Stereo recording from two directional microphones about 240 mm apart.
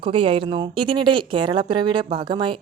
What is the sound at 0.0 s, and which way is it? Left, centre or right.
Speech, right.